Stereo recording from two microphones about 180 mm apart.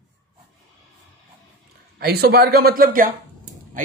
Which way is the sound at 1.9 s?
60° right (ahead or behind).